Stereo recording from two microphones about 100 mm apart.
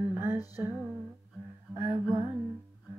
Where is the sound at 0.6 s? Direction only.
15° right (ahead or behind).